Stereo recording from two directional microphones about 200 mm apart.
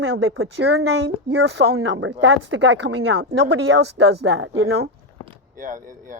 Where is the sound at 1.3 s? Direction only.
55° right (ahead or behind).